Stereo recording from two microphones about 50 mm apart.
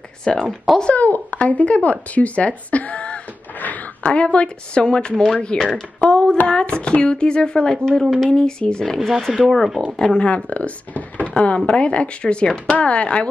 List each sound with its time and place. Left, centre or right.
0.2 s speech: centre
0.9 s a woman's voice: left